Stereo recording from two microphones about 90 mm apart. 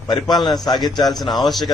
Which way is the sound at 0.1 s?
50° left (ahead or behind).